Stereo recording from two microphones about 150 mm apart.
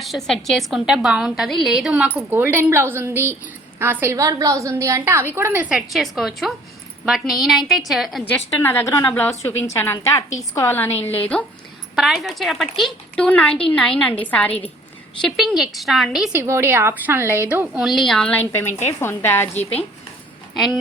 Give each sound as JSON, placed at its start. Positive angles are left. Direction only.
{"t": 0.0, "sound": "a woman's voice", "side_deg": 0}
{"t": 8.6, "sound": "a woman's voice", "side_deg": 15}
{"t": 11.9, "sound": "a woman's voice", "side_deg": 0}
{"t": 16.4, "sound": "a woman's voice", "side_deg": -15}